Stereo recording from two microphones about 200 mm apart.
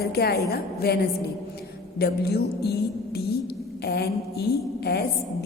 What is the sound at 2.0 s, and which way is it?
A woman's voice, 55° left (ahead or behind).